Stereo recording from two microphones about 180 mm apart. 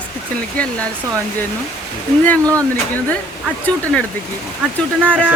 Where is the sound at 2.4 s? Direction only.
15° right (ahead or behind).